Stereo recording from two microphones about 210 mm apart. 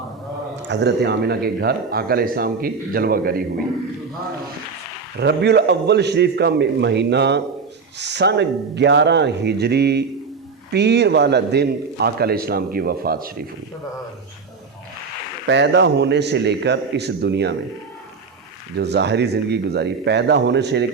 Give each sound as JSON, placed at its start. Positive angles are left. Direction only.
{"t": 0.7, "sound": "speech", "side_deg": -55}
{"t": 5.2, "sound": "speech", "side_deg": -50}
{"t": 15.4, "sound": "speech", "side_deg": -55}
{"t": 18.8, "sound": "speech", "side_deg": -50}